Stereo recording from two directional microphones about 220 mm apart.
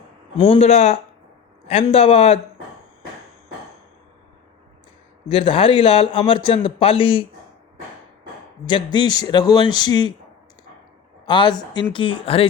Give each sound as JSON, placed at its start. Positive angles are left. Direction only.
{"t": 0.3, "sound": "speech", "side_deg": 25}
{"t": 5.3, "sound": "speech", "side_deg": 25}
{"t": 8.6, "sound": "speech", "side_deg": 20}
{"t": 11.3, "sound": "speech", "side_deg": 20}